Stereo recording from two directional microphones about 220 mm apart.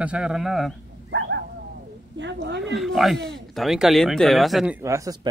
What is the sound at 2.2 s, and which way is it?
Speech, 55° right (ahead or behind).